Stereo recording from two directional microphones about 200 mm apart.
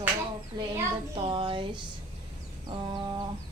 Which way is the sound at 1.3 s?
25° right (ahead or behind).